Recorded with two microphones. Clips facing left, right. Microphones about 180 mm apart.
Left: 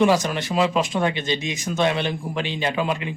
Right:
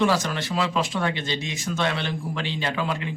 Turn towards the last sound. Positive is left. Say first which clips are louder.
# left 3 dB
turn(degrees=15)  # may be behind; listen again after turning